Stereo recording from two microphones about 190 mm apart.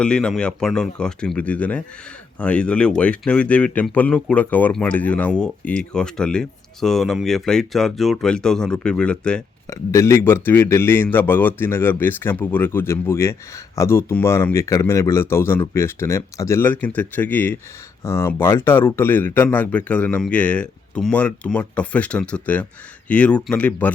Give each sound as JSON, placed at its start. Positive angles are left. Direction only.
{"t": 0.0, "sound": "speech", "side_deg": 5}
{"t": 9.6, "sound": "speech", "side_deg": 15}